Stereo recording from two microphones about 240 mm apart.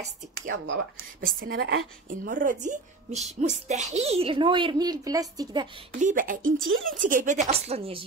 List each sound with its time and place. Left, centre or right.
0.5 s speech: right
1.2 s a woman's voice: right
2.0 s a woman's voice: right; by 5.7 s centre
5.9 s a woman's voice: right